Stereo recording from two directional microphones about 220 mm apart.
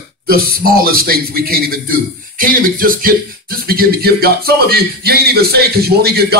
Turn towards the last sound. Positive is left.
turn(degrees=-45)  # may be behind; listen again after turning